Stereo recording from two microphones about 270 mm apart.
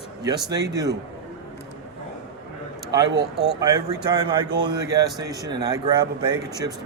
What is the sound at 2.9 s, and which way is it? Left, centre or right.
Speech, centre.